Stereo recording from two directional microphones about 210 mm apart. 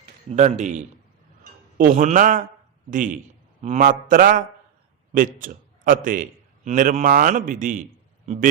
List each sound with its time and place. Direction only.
0.3 s a man's voice: 35° right (ahead or behind)